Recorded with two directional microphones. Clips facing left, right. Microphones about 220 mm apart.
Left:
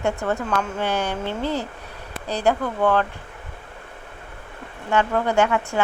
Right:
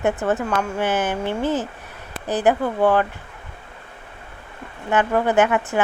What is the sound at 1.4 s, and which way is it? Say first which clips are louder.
Speech: right 3 dB; 15° left (ahead or behind).